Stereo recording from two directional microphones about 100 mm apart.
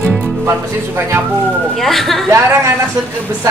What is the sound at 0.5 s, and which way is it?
Speech, 25° right (ahead or behind).